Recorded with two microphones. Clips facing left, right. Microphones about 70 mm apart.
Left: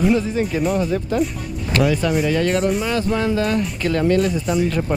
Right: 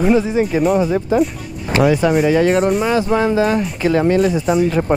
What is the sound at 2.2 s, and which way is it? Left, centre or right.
Speech, centre.